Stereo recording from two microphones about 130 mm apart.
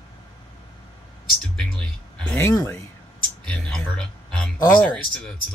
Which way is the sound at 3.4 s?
5° left (ahead or behind).